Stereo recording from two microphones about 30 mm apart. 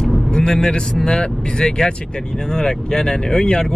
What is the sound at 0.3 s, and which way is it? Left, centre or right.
A man's voice, left.